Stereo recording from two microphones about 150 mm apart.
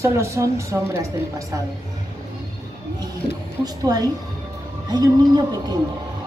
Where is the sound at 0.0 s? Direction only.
20° right (ahead or behind).